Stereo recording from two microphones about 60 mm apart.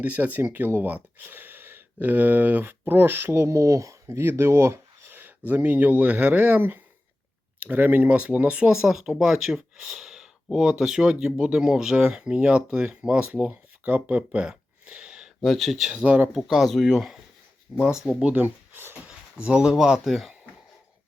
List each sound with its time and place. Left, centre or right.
0.0 s speech: right
8.7 s speech: centre
15.4 s speech: centre
15.9 s speech: right
16.3 s speech: centre
18.4 s a sound: right
19.0 s speech: centre